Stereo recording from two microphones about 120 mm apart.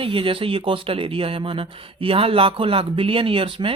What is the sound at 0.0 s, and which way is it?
Speech, 50° right (ahead or behind).